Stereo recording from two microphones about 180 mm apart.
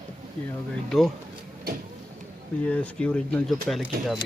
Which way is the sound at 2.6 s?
5° left (ahead or behind).